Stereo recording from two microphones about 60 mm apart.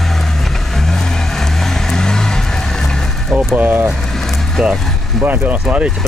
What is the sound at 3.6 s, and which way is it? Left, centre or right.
Speech, right.